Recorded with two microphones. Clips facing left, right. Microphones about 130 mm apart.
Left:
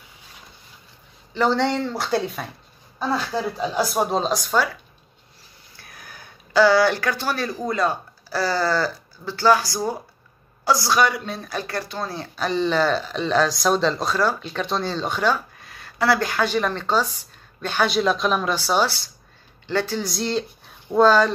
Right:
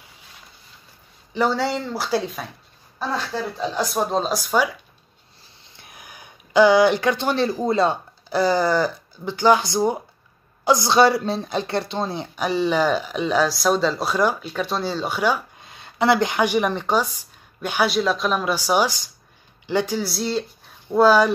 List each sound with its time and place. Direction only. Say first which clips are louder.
1.3 s speech: left 1 dB; 5° right (ahead or behind)
3.5 s speech: even; 10° left (ahead or behind)
5.8 s speech: even; 20° right (ahead or behind)